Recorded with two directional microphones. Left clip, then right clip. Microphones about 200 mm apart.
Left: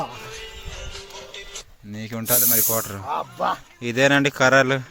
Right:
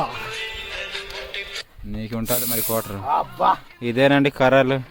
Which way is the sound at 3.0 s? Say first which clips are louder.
Right 9 dB; 50° left (ahead or behind).